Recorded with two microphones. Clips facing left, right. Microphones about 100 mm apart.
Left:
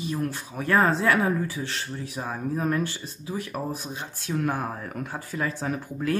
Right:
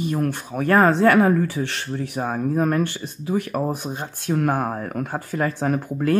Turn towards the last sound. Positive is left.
turn(degrees=-50)  # may be behind; listen again after turning